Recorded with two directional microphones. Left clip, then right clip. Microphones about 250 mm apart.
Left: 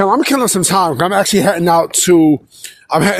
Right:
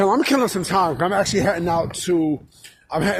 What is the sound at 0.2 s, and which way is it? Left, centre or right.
Speech, left.